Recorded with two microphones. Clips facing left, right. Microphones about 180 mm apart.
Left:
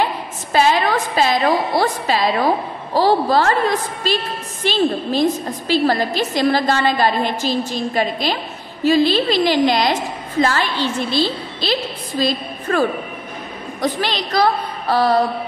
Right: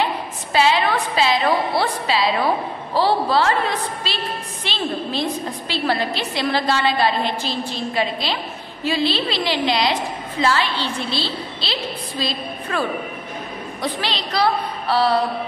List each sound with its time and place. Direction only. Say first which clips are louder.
0.5 s a woman's voice: left 2 dB; 45° left (ahead or behind)